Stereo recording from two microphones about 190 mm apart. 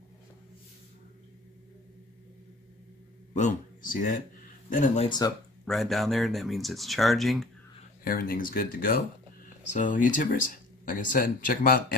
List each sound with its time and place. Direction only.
3.3 s speech: 40° left (ahead or behind)
5.7 s speech: centre (ahead or behind)
8.0 s speech: 50° left (ahead or behind)